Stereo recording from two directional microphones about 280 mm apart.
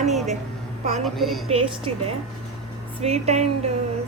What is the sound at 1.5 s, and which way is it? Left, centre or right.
A woman's voice, right.